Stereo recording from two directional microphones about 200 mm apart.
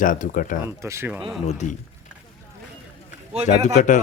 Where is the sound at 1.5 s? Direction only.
35° left (ahead or behind).